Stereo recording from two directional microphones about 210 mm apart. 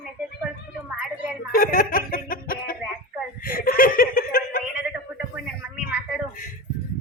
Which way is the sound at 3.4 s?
45° left (ahead or behind).